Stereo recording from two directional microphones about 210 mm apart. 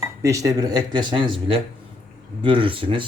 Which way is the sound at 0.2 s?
15° right (ahead or behind).